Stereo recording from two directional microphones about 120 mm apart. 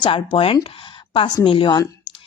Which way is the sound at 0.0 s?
45° left (ahead or behind).